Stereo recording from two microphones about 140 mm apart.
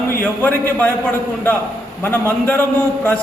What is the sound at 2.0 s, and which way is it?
Speech, 15° left (ahead or behind).